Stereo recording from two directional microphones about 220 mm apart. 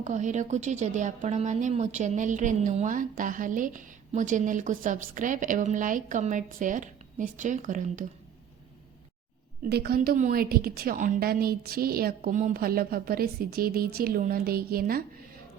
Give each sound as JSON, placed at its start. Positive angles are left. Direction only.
{"t": 0.0, "sound": "a woman's voice", "side_deg": -35}
{"t": 9.6, "sound": "a woman's voice", "side_deg": -45}